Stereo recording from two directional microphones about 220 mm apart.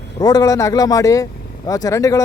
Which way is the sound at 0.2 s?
15° left (ahead or behind).